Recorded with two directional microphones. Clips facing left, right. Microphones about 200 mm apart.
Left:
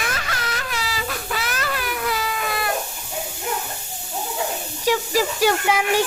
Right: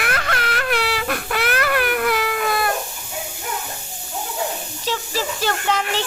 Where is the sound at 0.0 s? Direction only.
60° right (ahead or behind).